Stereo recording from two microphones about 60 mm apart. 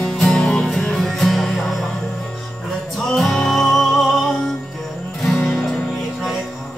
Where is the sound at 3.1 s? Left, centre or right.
Centre.